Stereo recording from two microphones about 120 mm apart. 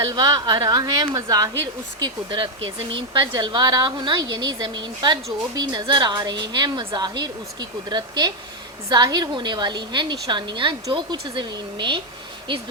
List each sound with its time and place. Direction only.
0.0 s a woman's voice: 30° right (ahead or behind)